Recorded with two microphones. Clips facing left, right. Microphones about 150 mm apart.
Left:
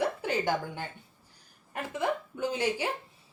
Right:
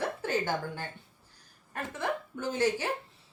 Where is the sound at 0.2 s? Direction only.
15° left (ahead or behind).